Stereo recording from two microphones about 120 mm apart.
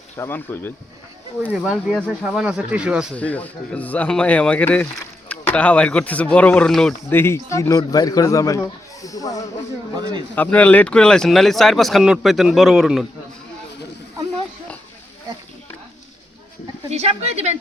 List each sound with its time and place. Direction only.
0.2 s speech: 15° left (ahead or behind)
1.4 s speech: 10° right (ahead or behind)
3.2 s speech: 10° left (ahead or behind)
7.1 s a man's voice: 20° left (ahead or behind)
10.3 s speech: 15° left (ahead or behind); by 13.1 s centre (ahead or behind)
16.9 s a woman's voice: 60° right (ahead or behind)